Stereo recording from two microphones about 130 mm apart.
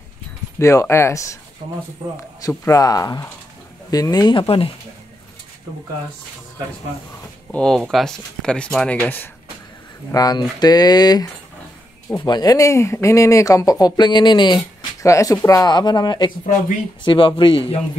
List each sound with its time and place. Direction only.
0.6 s speech: 25° left (ahead or behind); by 4.6 s 45° left (ahead or behind)
7.5 s speech: 5° left (ahead or behind)
10.1 s speech: 30° left (ahead or behind)
12.3 s speech: 30° left (ahead or behind)
15.0 s speech: 25° left (ahead or behind)